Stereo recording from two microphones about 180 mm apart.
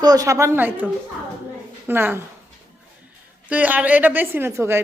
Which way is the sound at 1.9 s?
10° right (ahead or behind).